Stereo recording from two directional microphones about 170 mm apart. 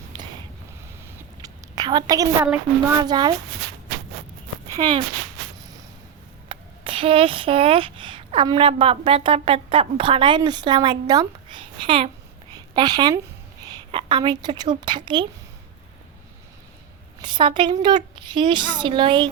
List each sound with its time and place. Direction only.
1.4 s a sound: 25° right (ahead or behind)
2.9 s a woman's voice: 25° right (ahead or behind)
4.7 s speech: 25° right (ahead or behind)
6.5 s a woman's voice: 30° right (ahead or behind)
17.2 s a woman's voice: 25° right (ahead or behind)